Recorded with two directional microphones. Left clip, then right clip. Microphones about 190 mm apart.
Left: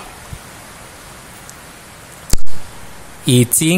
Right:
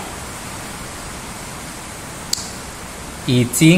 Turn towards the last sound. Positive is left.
turn(degrees=50)  # may be behind; listen again after turning